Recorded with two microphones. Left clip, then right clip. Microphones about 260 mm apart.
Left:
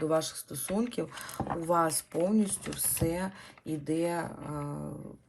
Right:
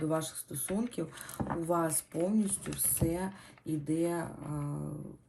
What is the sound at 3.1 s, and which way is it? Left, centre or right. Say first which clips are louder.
Speech: left 2 dB; left.